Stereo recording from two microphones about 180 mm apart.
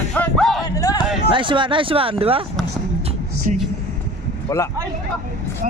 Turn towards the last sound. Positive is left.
turn(degrees=15)  # may be behind; listen again after turning